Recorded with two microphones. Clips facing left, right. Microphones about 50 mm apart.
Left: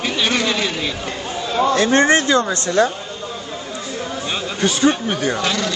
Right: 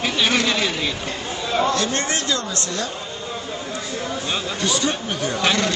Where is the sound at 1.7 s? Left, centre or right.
Left.